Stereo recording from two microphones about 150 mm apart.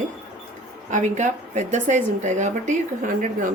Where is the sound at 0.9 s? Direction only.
55° right (ahead or behind).